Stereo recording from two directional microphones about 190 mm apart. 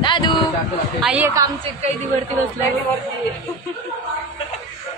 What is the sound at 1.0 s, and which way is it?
Speech, 5° right (ahead or behind).